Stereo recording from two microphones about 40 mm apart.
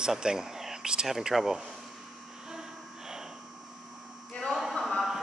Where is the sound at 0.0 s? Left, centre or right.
Centre.